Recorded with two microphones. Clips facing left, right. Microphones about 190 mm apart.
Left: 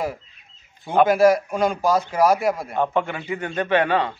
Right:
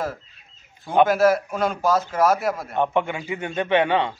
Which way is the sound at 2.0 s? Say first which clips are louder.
Left 2 dB; centre (ahead or behind).